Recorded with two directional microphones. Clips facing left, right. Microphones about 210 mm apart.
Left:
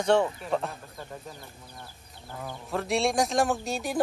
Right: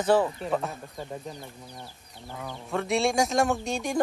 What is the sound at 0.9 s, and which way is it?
Speech, 20° right (ahead or behind).